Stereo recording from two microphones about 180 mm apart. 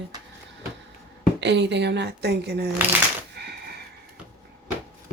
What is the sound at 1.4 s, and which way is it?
A woman's voice, 75° right (ahead or behind).